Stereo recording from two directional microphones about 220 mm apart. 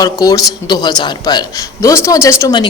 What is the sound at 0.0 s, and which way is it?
Speech, 15° left (ahead or behind).